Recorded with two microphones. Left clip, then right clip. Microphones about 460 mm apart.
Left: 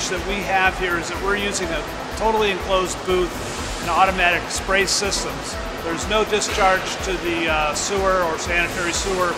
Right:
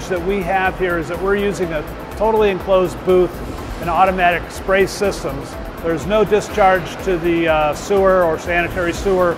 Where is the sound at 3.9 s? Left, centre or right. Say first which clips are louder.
Right 3 dB; right.